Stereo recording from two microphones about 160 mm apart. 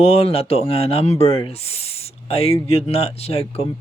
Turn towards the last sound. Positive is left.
turn(degrees=40)  # may be behind; listen again after turning